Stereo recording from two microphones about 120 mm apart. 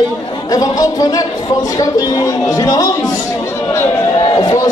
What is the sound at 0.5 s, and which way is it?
A man's voice, 30° left (ahead or behind).